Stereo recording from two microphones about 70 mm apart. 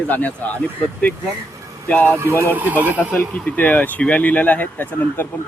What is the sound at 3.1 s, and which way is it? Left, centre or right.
Speech, left.